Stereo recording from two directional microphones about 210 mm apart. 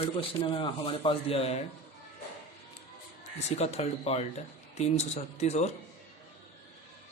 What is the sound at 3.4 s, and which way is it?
Speech, 30° left (ahead or behind).